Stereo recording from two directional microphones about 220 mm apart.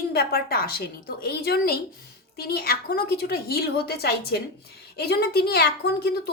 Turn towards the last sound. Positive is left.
turn(degrees=45)  # may be behind; listen again after turning